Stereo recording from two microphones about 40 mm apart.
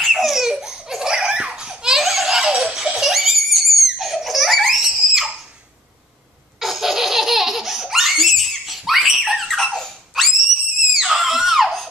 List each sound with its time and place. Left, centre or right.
0.0 s laughter: centre
2.0 s baby laughter: centre
2.6 s giggle: centre
3.1 s baby laughter: centre
6.6 s laughter: centre
8.6 s baby laughter: centre
9.7 s a sound: centre
10.1 s screaming: centre